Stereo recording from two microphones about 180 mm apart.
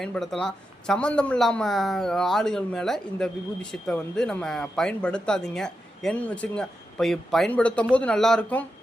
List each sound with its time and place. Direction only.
0.0 s a man's voice: centre (ahead or behind)